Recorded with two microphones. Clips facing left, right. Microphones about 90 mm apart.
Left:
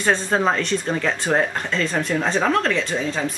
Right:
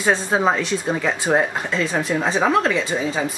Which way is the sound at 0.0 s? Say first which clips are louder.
Right 1 dB; 5° right (ahead or behind).